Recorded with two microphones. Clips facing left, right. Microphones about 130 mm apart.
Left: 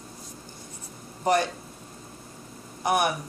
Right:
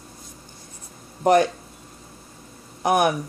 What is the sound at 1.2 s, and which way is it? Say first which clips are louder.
Speech: right 6 dB; 50° right (ahead or behind).